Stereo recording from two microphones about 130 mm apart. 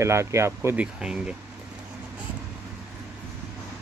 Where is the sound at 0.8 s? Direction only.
5° right (ahead or behind).